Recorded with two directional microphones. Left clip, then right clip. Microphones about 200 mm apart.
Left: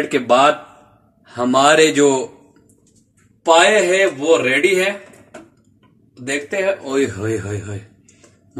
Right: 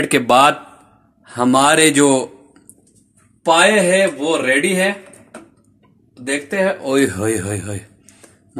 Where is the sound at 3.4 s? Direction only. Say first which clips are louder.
Left 1 dB; 40° right (ahead or behind).